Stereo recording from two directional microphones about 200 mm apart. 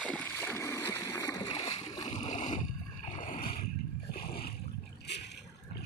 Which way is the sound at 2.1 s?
35° left (ahead or behind).